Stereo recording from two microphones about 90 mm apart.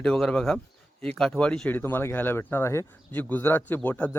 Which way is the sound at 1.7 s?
20° left (ahead or behind).